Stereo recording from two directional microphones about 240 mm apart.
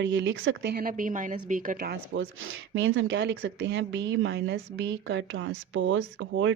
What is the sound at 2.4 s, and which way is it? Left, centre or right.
Speech, right.